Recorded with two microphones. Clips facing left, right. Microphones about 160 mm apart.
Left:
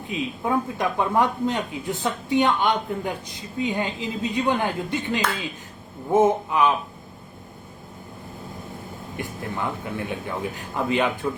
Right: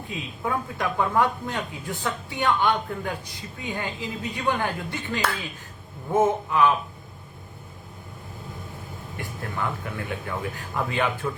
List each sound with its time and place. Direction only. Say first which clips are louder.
0.1 s speech: left 5 dB; 20° left (ahead or behind)
9.1 s speech: left 2 dB; 20° left (ahead or behind)